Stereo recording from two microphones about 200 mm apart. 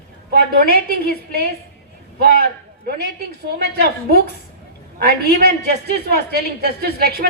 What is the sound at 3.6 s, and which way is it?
A woman's voice, 50° right (ahead or behind).